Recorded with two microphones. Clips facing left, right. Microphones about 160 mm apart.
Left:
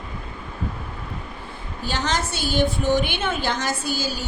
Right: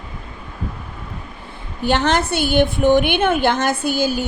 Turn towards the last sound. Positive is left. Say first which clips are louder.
# right 8 dB
turn(degrees=-55)  # may be behind; listen again after turning